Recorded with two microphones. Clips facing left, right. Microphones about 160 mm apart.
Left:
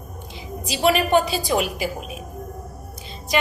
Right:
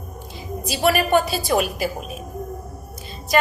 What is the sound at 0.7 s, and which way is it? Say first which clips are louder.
Speech: even; 20° left (ahead or behind).